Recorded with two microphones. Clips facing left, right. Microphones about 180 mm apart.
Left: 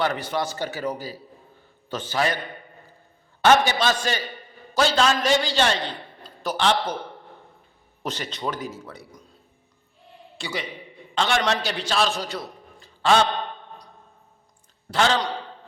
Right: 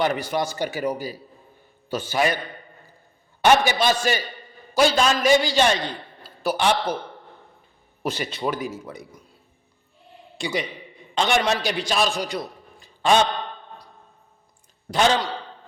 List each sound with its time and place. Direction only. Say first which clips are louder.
0.0 s a man's voice: right 2 dB; 15° right (ahead or behind)
3.4 s a man's voice: right 1 dB; 15° right (ahead or behind)
8.0 s a man's voice: right 3 dB; 10° right (ahead or behind)
10.3 s a man's voice: right 4 dB; 15° right (ahead or behind)
14.8 s a man's voice: right 2 dB; 15° right (ahead or behind)